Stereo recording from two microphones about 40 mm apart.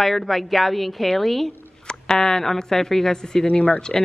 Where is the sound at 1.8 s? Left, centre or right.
Centre.